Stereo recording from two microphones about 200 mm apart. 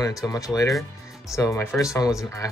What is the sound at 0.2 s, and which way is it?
Speech, 20° left (ahead or behind).